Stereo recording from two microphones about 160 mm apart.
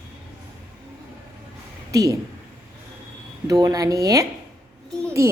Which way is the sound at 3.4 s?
25° right (ahead or behind).